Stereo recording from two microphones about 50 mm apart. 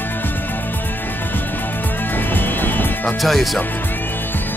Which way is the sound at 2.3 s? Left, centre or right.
Left.